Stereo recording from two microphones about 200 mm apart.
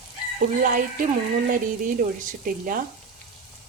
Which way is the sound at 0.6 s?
40° right (ahead or behind).